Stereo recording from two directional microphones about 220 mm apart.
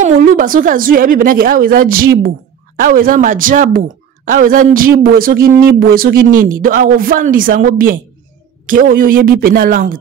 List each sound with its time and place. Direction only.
0.0 s a man's voice: 40° right (ahead or behind)